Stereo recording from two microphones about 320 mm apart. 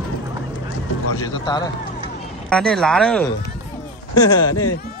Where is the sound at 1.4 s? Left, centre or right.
Centre.